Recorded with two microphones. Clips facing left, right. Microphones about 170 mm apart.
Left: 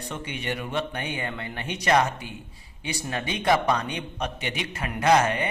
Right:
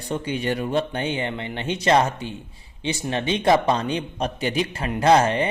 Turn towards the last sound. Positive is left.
turn(degrees=-30)  # may be behind; listen again after turning